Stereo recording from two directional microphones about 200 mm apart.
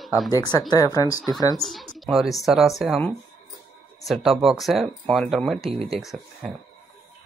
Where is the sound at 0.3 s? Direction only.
20° left (ahead or behind).